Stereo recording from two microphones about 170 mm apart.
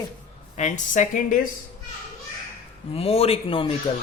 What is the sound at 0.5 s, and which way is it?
Speech, 45° left (ahead or behind).